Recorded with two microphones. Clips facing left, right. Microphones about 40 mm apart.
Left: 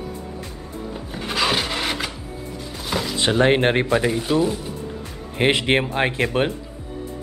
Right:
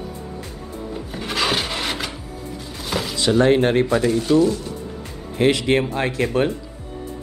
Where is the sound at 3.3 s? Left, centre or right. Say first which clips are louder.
Right 2 dB; left.